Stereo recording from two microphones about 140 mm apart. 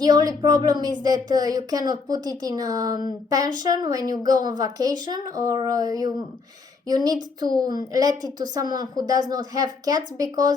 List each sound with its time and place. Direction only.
0.0 s a woman's voice: 25° right (ahead or behind)